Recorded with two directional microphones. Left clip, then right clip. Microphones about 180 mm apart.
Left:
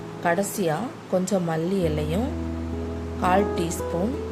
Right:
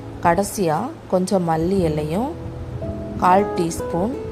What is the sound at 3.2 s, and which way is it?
Speech, 30° right (ahead or behind).